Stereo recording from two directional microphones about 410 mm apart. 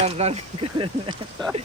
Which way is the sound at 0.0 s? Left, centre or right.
Centre.